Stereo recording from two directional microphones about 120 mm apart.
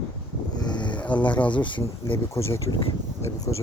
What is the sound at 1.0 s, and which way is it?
Speech, 10° left (ahead or behind).